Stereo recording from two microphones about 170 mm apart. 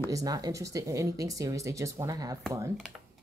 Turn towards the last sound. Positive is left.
turn(degrees=-5)  # may be behind; listen again after turning